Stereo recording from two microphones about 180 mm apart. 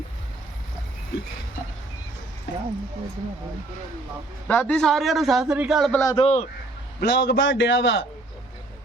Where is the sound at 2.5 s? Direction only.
80° left.